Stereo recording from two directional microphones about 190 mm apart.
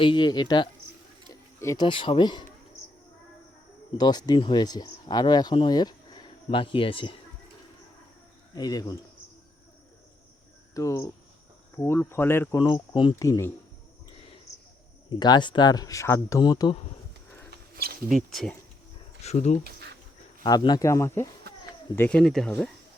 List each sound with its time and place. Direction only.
0.0 s speech: 25° left (ahead or behind)
3.9 s speech: 20° left (ahead or behind)
8.5 s speech: 20° left (ahead or behind)
10.8 s speech: 15° left (ahead or behind)
12.6 s speech: 25° left (ahead or behind)
15.1 s speech: 20° left (ahead or behind)
18.1 s speech: centre (ahead or behind)
19.2 s speech: 35° left (ahead or behind)
20.4 s speech: 20° left (ahead or behind); by 22.5 s centre (ahead or behind)